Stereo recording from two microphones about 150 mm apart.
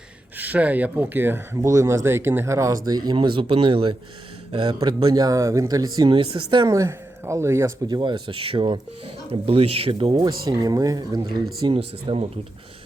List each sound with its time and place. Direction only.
0.3 s speech: 10° right (ahead or behind); by 12.3 s 40° right (ahead or behind)